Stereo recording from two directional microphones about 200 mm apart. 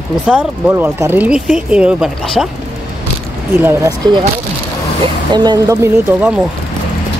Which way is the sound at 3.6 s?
20° right (ahead or behind).